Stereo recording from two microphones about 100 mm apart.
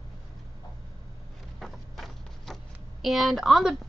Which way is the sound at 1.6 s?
Centre (ahead or behind).